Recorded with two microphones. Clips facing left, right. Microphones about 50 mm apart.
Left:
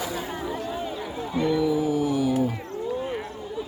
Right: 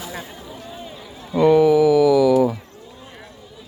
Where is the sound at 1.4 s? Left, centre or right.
Right.